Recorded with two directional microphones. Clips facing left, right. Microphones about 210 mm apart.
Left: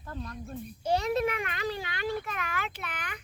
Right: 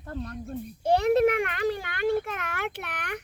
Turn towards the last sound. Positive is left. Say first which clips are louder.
# right 5 dB
turn(degrees=-65)  # may be behind; listen again after turning